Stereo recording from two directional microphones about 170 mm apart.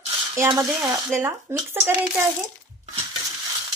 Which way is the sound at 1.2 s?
15° right (ahead or behind).